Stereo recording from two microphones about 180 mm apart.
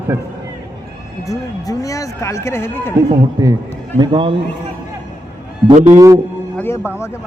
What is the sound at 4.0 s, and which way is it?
Speech, 25° right (ahead or behind).